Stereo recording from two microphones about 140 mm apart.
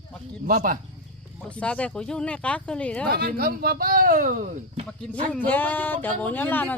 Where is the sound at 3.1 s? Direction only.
90° right; by 4.6 s 70° right (ahead or behind).